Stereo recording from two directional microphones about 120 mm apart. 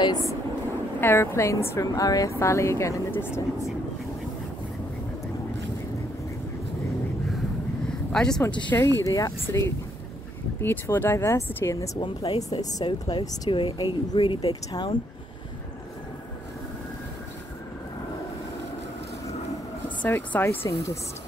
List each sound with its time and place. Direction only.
0.0 s a sound: 30° left (ahead or behind)
1.0 s speech: 20° left (ahead or behind)
7.8 s a sound: 5° left (ahead or behind)
8.6 s speech: 20° left (ahead or behind)
10.6 s speech: 15° left (ahead or behind)
12.0 s speech: 40° left (ahead or behind)
13.5 s speech: 40° left (ahead or behind)
20.0 s speech: 15° left (ahead or behind)